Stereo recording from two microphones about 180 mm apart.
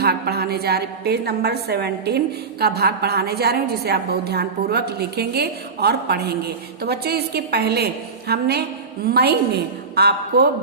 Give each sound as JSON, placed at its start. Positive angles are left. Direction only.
{"t": 0.0, "sound": "a woman's voice", "side_deg": -60}